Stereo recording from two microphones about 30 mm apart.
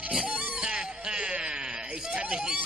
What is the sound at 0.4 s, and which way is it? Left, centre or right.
Music, right.